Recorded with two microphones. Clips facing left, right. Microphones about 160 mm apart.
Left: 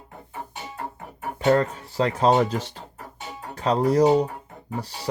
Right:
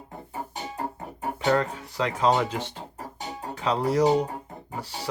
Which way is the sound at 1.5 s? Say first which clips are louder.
Left 4 dB; 35° left (ahead or behind).